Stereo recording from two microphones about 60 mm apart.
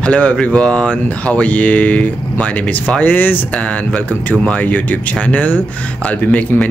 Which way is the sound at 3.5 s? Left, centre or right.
Left.